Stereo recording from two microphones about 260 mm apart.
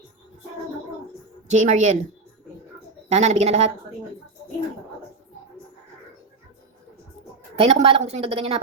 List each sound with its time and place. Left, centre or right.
1.5 s a woman's voice: right
3.1 s a woman's voice: right
7.5 s a woman's voice: right